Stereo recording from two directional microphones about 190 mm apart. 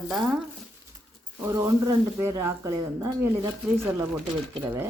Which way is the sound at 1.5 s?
15° right (ahead or behind).